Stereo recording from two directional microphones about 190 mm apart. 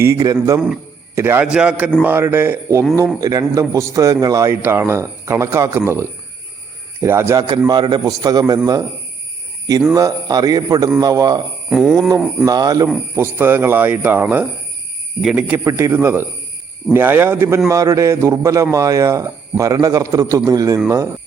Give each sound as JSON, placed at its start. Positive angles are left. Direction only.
{"t": 0.0, "sound": "a man's voice", "side_deg": -15}
{"t": 9.9, "sound": "a man's voice", "side_deg": -20}
{"t": 11.7, "sound": "a sound", "side_deg": -5}
{"t": 12.5, "sound": "a man's voice", "side_deg": -20}